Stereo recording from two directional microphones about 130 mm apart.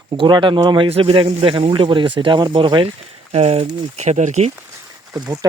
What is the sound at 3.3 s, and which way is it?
Speech, 50° right (ahead or behind).